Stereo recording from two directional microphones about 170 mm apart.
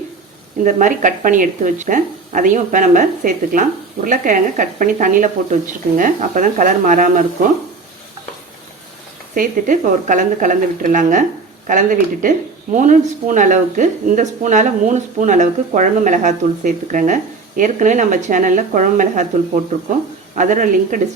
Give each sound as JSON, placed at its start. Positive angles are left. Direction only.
{"t": 0.6, "sound": "a woman's voice", "side_deg": -50}
{"t": 9.3, "sound": "a woman's voice", "side_deg": -50}
{"t": 20.3, "sound": "a woman's voice", "side_deg": -50}